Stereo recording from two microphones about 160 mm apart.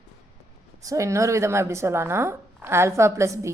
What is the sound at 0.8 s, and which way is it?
A woman's voice, 20° right (ahead or behind).